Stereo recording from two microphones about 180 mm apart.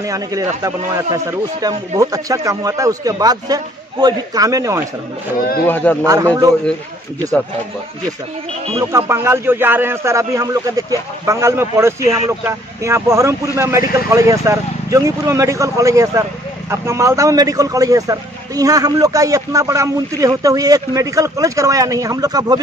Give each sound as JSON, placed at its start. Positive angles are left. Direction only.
{"t": 0.0, "sound": "a man's voice", "side_deg": -20}
{"t": 5.7, "sound": "a man's voice", "side_deg": 10}
{"t": 6.0, "sound": "a man's voice", "side_deg": -20}
{"t": 8.9, "sound": "a man's voice", "side_deg": -15}